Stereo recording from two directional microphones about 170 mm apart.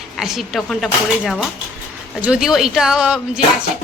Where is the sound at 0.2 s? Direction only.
Centre (ahead or behind).